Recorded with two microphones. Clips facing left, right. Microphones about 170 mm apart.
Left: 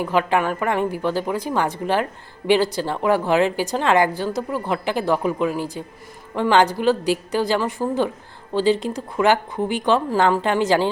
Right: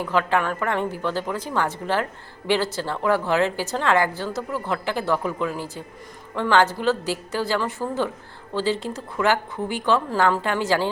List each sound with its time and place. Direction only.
0.0 s a woman's voice: 15° left (ahead or behind)